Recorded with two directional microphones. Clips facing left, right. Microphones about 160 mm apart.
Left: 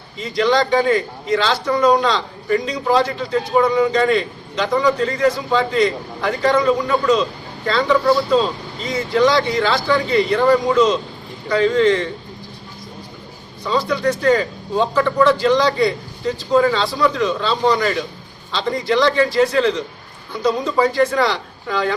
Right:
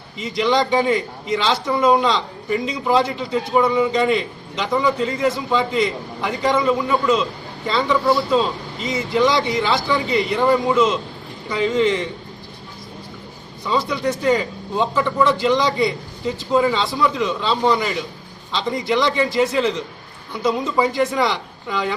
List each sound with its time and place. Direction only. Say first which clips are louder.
0.2 s a man's voice: left 2 dB; 20° right (ahead or behind)
13.8 s a man's voice: left 5 dB; 15° right (ahead or behind)